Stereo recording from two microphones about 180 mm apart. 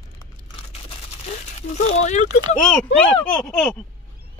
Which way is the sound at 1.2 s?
35° left (ahead or behind).